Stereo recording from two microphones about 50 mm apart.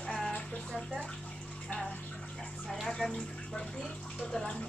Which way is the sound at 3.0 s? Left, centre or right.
Centre.